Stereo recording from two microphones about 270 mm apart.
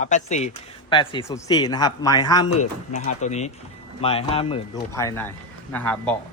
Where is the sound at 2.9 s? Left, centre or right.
Left.